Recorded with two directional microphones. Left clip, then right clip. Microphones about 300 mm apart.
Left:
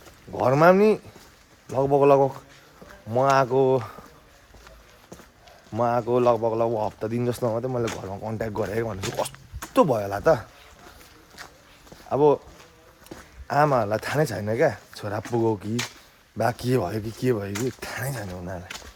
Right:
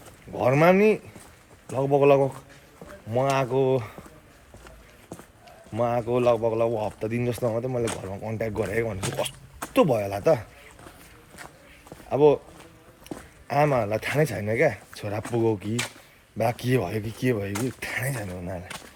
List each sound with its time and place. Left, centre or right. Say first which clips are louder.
0.3 s speech: left 2 dB; centre
5.7 s speech: left 2 dB; centre
12.0 s speech: even; centre
13.5 s speech: left 2 dB; centre